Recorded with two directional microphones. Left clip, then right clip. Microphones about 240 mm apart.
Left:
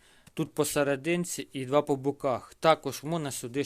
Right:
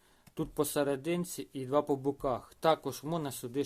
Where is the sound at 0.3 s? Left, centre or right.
Left.